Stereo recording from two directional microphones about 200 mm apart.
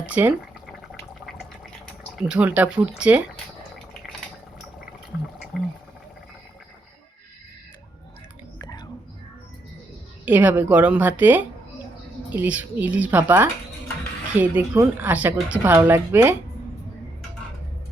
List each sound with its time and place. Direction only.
0.0 s a woman's voice: 5° right (ahead or behind)
1.2 s a sound: centre (ahead or behind)
2.2 s speech: 5° right (ahead or behind)
8.5 s whispering: 20° left (ahead or behind)
10.2 s a woman's voice: 5° right (ahead or behind)